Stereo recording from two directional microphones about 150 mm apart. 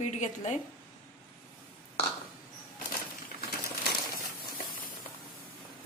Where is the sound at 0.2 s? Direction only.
50° left (ahead or behind).